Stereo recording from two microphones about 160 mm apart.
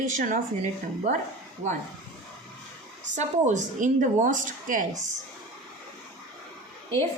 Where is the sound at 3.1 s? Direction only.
50° right (ahead or behind).